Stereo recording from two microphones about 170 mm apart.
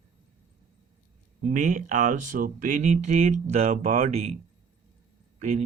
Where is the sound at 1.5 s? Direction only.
50° right (ahead or behind).